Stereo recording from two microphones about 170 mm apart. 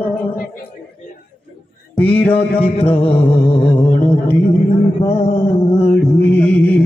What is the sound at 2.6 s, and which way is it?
Mantra, 35° left (ahead or behind).